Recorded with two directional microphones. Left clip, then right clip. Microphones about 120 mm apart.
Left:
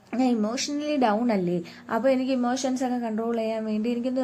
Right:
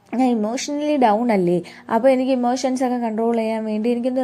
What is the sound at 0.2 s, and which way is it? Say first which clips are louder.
A woman's voice: right 5 dB; 40° right (ahead or behind).